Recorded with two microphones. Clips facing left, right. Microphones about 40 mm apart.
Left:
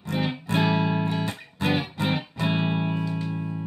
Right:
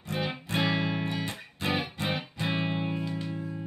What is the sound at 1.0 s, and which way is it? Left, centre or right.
Music, left.